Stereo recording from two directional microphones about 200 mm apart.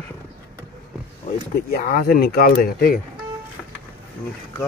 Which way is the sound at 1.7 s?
45° left (ahead or behind).